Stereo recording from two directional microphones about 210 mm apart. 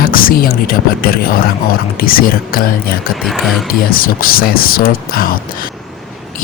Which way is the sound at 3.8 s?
45° left (ahead or behind).